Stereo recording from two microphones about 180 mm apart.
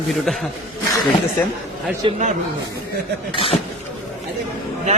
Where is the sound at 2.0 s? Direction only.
25° right (ahead or behind).